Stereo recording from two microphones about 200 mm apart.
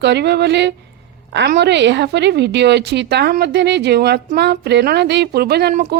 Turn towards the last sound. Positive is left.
turn(degrees=-55)  # may be behind; listen again after turning